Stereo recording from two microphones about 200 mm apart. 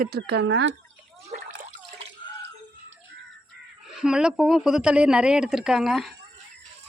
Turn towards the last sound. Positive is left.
turn(degrees=0)  # may be behind; listen again after turning